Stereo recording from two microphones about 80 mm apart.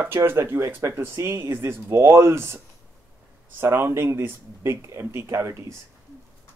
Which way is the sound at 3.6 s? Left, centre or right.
Right.